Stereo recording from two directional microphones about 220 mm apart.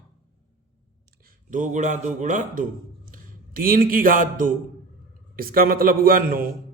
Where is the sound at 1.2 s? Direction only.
35° right (ahead or behind).